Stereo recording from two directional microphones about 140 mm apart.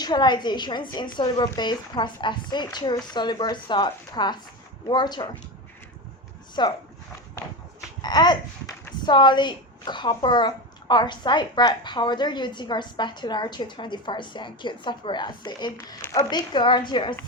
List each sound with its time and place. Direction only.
0.0 s a woman's voice: 30° left (ahead or behind)
6.6 s a woman's voice: 35° left (ahead or behind)
8.0 s a woman's voice: 30° left (ahead or behind)